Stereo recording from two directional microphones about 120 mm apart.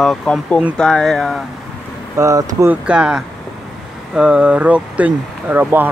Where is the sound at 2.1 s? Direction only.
30° right (ahead or behind).